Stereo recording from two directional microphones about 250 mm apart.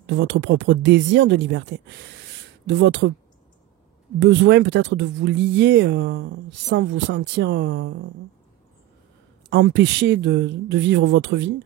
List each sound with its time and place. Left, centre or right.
0.0 s speech: right
4.2 s speech: right
9.5 s speech: right